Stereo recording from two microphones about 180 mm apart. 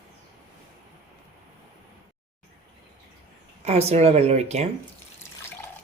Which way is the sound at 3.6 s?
35° right (ahead or behind).